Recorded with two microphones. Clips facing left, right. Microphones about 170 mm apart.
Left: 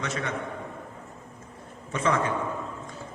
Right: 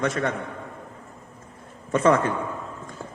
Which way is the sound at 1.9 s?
50° right (ahead or behind).